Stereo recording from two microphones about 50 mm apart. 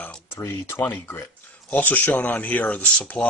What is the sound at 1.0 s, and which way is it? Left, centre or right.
Speech, left.